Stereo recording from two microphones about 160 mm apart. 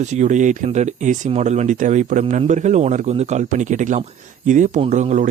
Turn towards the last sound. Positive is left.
turn(degrees=-50)  # may be behind; listen again after turning